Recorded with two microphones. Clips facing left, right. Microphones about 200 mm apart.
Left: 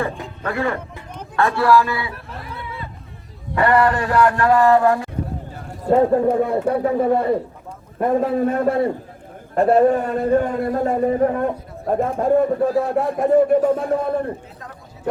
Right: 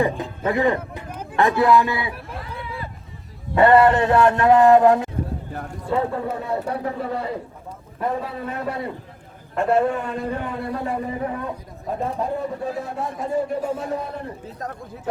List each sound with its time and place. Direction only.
0.2 s a man's voice: 20° right (ahead or behind)
3.5 s a man's voice: 25° right (ahead or behind)
5.8 s a man's voice: 45° left (ahead or behind)
9.6 s a man's voice: 40° left (ahead or behind); by 14.3 s 55° left (ahead or behind)